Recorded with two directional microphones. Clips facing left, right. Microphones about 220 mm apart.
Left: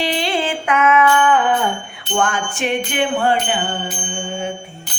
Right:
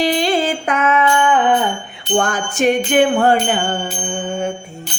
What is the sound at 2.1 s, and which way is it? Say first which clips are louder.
Music: right 3 dB; 40° right (ahead or behind).